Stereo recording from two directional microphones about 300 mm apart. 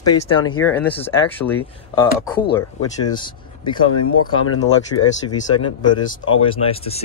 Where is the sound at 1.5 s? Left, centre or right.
Centre.